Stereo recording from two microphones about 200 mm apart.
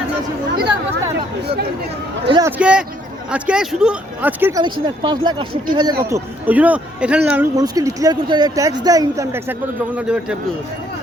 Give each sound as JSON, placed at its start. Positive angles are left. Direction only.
{"t": 2.2, "sound": "a man's voice", "side_deg": -20}
{"t": 2.6, "sound": "a man's voice", "side_deg": -5}
{"t": 4.6, "sound": "speech", "side_deg": -20}
{"t": 7.5, "sound": "speech", "side_deg": -15}